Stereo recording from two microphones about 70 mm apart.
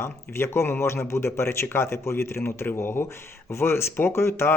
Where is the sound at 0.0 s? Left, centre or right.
Left.